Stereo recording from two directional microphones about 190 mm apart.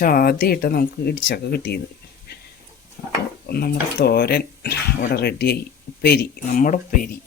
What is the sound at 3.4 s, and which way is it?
Speech, 55° left (ahead or behind).